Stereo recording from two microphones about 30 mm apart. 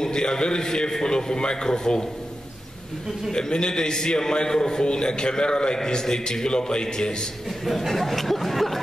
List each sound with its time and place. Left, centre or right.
0.0 s a man's voice: left
3.3 s a man's voice: left
7.6 s speech: centre